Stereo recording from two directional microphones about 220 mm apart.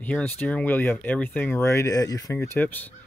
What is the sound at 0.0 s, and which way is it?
Speech, 5° left (ahead or behind).